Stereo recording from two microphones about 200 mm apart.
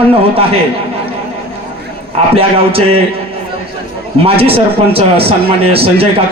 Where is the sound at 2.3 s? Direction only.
30° right (ahead or behind).